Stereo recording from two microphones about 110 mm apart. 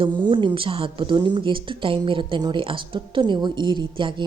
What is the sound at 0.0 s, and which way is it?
A woman's voice, 45° right (ahead or behind).